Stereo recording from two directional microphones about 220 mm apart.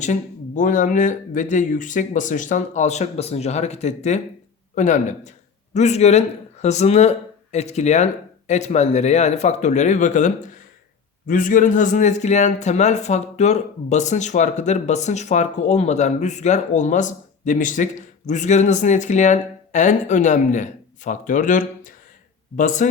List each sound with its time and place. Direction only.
0.0 s speech: 35° left (ahead or behind)